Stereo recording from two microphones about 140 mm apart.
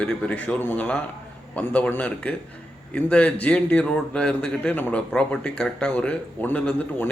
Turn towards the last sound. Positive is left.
turn(degrees=10)  # may be behind; listen again after turning